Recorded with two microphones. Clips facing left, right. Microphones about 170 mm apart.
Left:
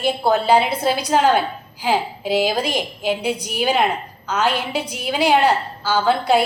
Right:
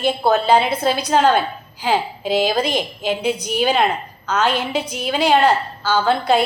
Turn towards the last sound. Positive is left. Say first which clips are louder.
# even
turn(degrees=10)  # may be behind; listen again after turning